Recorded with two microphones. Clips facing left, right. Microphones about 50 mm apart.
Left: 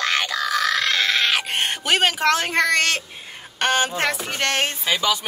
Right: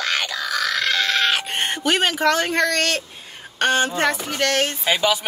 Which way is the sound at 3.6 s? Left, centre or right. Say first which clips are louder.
Right 1 dB; centre.